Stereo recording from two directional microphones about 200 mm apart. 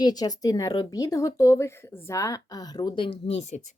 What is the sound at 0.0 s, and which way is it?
Speech, 20° left (ahead or behind).